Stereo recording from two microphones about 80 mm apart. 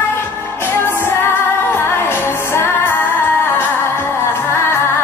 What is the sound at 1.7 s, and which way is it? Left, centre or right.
Music, left.